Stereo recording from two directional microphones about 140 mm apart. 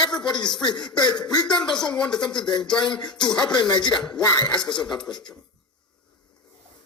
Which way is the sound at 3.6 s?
30° left (ahead or behind).